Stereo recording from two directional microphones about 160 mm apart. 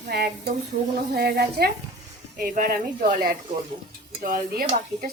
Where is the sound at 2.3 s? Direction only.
60° right (ahead or behind).